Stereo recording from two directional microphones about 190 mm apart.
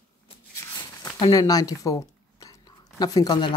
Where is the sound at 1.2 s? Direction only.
20° left (ahead or behind).